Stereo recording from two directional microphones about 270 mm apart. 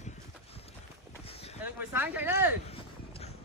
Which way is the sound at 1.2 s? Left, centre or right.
Left.